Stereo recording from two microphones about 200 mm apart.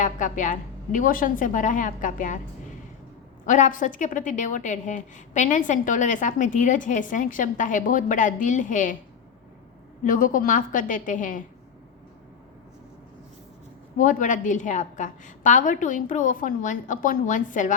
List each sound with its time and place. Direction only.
0.0 s a woman's voice: 40° left (ahead or behind)
3.4 s a woman's voice: 40° left (ahead or behind)
10.0 s a woman's voice: 40° left (ahead or behind)
14.0 s a woman's voice: 40° left (ahead or behind)